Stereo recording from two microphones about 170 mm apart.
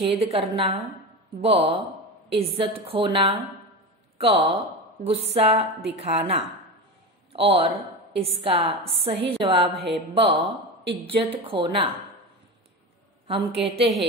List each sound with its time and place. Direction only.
0.0 s a woman's voice: 35° right (ahead or behind)
13.7 s a woman's voice: 35° right (ahead or behind)